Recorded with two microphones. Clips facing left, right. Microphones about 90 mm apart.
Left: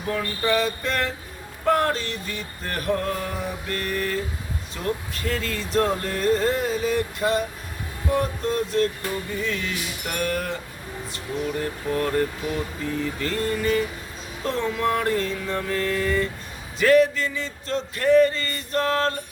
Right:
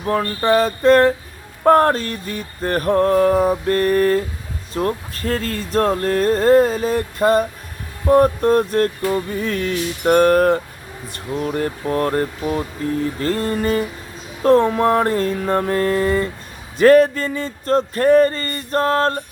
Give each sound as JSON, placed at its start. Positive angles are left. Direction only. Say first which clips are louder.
{"t": 0.0, "sound": "speech", "louder": "right 6 dB", "side_deg": -45}